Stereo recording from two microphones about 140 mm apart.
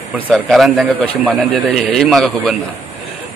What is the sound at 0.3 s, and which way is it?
A man's voice, centre (ahead or behind).